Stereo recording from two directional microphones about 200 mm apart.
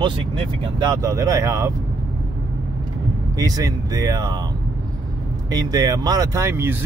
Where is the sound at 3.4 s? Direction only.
20° right (ahead or behind).